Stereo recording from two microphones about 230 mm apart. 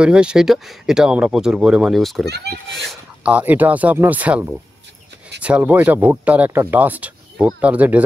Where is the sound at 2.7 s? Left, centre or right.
Centre.